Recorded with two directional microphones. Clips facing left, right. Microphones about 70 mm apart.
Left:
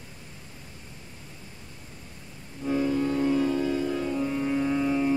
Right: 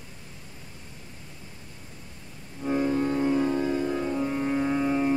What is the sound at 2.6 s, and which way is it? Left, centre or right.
Music, right.